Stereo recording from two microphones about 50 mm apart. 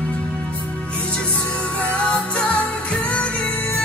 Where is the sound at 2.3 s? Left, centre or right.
Left.